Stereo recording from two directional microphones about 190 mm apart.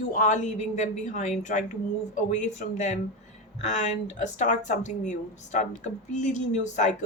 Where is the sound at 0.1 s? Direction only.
40° left (ahead or behind).